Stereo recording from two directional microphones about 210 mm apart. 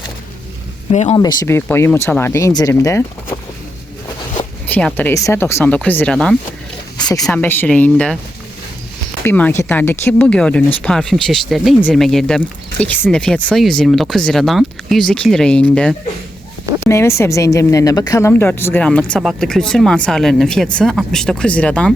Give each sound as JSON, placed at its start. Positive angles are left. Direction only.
{"t": 1.1, "sound": "a woman's voice", "side_deg": 20}
{"t": 4.6, "sound": "a woman's voice", "side_deg": 5}
{"t": 7.0, "sound": "speech", "side_deg": 15}
{"t": 7.3, "sound": "speech", "side_deg": 5}
{"t": 9.2, "sound": "a woman's voice", "side_deg": 10}